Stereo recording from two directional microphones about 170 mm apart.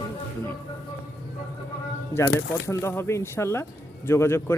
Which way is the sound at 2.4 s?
15° left (ahead or behind).